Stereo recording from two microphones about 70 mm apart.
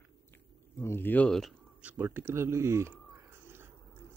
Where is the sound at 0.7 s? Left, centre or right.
Left.